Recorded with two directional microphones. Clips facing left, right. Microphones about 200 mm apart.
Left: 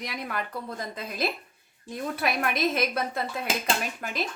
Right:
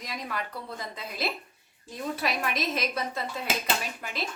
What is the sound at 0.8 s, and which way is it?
A woman's voice, 50° left (ahead or behind).